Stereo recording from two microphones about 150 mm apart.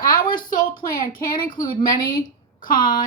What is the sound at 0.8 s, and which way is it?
Speech, 75° left (ahead or behind).